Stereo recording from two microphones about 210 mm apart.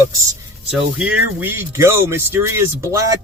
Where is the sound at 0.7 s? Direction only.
5° right (ahead or behind).